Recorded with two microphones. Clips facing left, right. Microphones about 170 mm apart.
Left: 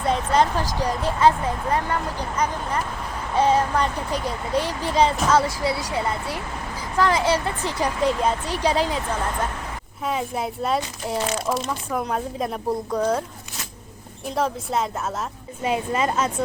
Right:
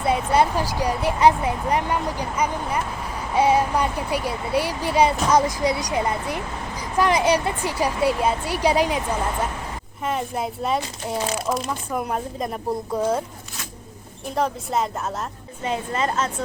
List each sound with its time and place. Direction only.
0.0 s speech: 10° right (ahead or behind)
10.0 s speech: centre (ahead or behind)
14.3 s speech: centre (ahead or behind)
15.6 s a woman's voice: 10° left (ahead or behind)